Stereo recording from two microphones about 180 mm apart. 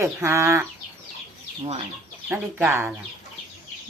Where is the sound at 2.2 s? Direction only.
10° right (ahead or behind).